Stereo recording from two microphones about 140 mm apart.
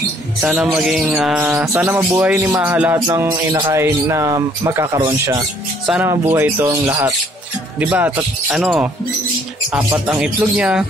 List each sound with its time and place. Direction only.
0.4 s mantra: 5° right (ahead or behind)
3.1 s speech: 20° right (ahead or behind)
6.0 s speech: 15° right (ahead or behind)
7.8 s mantra: 15° right (ahead or behind)
8.5 s speech: centre (ahead or behind)
9.7 s mantra: 10° right (ahead or behind)